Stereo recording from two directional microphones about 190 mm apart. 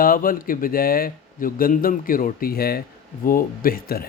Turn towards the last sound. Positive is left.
turn(degrees=50)  # may be behind; listen again after turning